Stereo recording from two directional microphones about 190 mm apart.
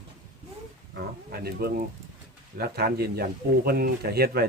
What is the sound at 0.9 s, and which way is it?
Speech, 55° right (ahead or behind).